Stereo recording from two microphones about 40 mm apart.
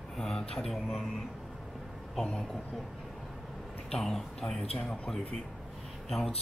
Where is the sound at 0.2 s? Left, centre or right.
Centre.